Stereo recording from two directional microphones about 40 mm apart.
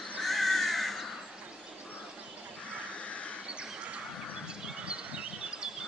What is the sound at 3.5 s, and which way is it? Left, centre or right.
Bird, right.